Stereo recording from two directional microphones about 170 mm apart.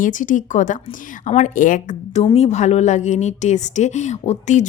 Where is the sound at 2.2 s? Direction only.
35° left (ahead or behind).